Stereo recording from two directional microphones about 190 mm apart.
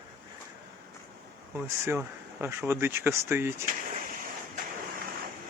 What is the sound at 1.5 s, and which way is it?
Speech, 10° right (ahead or behind).